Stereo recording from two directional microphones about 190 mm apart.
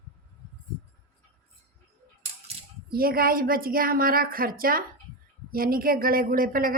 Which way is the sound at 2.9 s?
50° right (ahead or behind).